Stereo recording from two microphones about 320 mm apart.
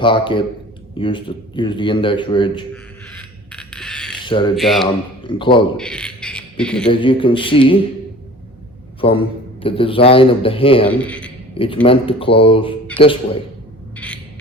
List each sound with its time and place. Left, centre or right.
0.0 s a man's voice: centre
3.1 s a sound: centre
4.2 s speech: centre
4.5 s speech: centre
5.2 s a man's voice: centre
5.7 s a sound: centre
7.0 s a man's voice: centre
9.0 s a man's voice: centre
10.8 s a man's voice: centre
11.5 s a man's voice: centre
13.9 s a sound: centre